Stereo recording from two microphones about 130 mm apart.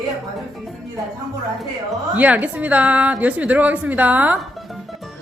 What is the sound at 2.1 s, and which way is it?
A woman's voice, 10° right (ahead or behind).